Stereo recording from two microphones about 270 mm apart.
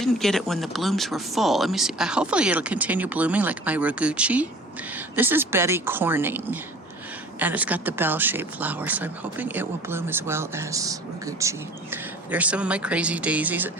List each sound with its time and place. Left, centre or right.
0.0 s speech: centre